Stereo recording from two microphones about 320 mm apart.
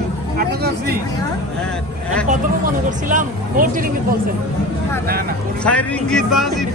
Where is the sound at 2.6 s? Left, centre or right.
Right.